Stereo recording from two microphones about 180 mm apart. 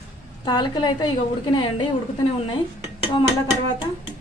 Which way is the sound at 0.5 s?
25° left (ahead or behind).